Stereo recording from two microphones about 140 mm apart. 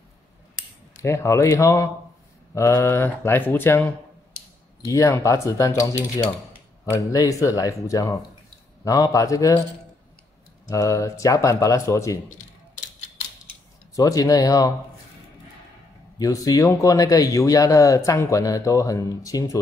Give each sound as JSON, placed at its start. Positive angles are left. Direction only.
{"t": 1.0, "sound": "speech", "side_deg": 20}
{"t": 4.8, "sound": "speech", "side_deg": 20}
{"t": 10.7, "sound": "speech", "side_deg": 25}
{"t": 12.3, "sound": "a sound", "side_deg": 65}
{"t": 13.9, "sound": "speech", "side_deg": 25}
{"t": 16.2, "sound": "speech", "side_deg": 25}